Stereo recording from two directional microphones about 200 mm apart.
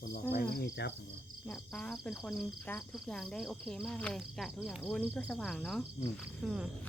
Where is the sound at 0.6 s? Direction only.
55° left (ahead or behind).